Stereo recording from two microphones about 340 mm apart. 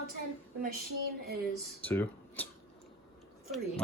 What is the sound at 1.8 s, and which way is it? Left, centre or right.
Speech, centre.